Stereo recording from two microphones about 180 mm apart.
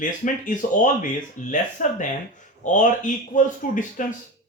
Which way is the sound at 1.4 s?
45° left (ahead or behind).